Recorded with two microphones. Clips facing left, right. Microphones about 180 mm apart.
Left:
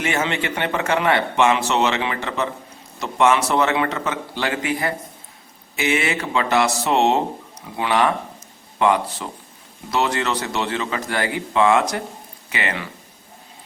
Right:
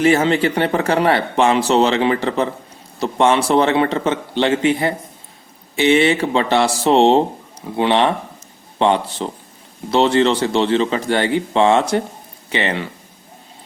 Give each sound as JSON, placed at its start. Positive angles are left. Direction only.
{"t": 0.0, "sound": "speech", "side_deg": -35}